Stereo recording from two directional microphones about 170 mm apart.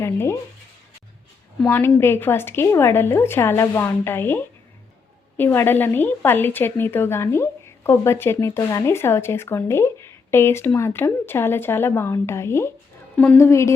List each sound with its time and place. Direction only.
0.0 s a woman's voice: 15° left (ahead or behind)
1.6 s a woman's voice: 10° left (ahead or behind)